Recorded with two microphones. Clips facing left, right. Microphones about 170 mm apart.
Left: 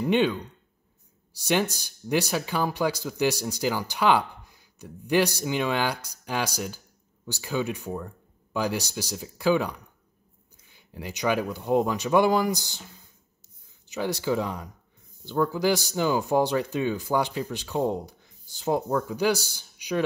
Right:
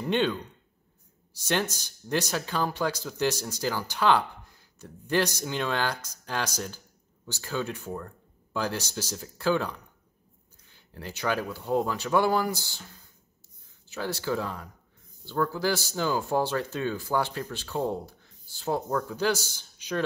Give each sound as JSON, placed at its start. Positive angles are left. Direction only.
{"t": 0.0, "sound": "speech", "side_deg": 10}
{"t": 13.8, "sound": "speech", "side_deg": 15}